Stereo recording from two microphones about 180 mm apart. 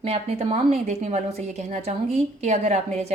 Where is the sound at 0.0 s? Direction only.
35° right (ahead or behind).